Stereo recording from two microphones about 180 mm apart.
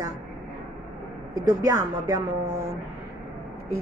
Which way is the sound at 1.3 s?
20° right (ahead or behind).